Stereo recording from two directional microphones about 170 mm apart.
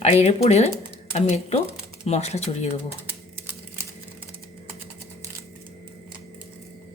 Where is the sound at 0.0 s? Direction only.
40° left (ahead or behind).